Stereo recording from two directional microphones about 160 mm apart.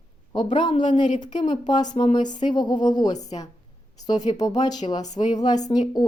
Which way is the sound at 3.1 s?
45° left (ahead or behind).